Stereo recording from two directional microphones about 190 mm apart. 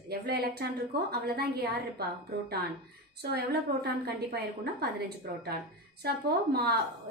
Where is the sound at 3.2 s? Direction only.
55° right (ahead or behind).